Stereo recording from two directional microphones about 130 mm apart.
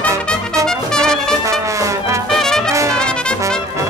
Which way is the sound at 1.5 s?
25° right (ahead or behind).